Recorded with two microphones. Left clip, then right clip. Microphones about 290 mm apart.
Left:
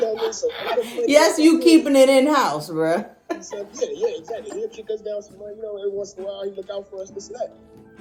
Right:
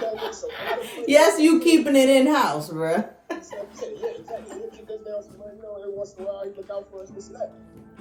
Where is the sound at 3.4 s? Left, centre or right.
Left.